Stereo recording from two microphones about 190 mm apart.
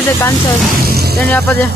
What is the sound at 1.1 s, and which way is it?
Speech, 10° left (ahead or behind).